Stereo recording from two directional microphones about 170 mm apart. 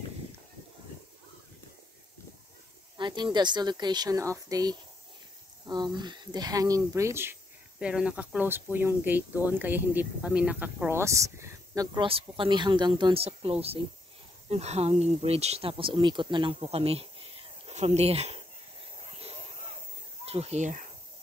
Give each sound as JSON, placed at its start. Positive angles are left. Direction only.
{"t": 3.0, "sound": "speech", "side_deg": -25}
{"t": 19.0, "sound": "a sound", "side_deg": -35}
{"t": 20.2, "sound": "speech", "side_deg": -35}